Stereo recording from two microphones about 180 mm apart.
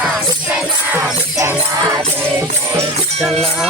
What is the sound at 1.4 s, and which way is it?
Music, 20° right (ahead or behind).